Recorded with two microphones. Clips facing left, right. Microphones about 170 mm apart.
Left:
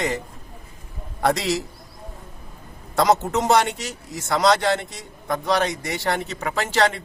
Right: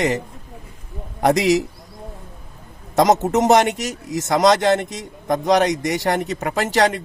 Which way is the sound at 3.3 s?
20° right (ahead or behind).